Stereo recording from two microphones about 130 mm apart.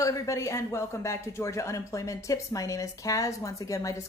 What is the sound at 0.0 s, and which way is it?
Speech, 25° left (ahead or behind).